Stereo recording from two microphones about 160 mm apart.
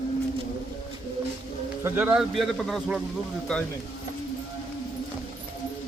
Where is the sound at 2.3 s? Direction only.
Centre (ahead or behind).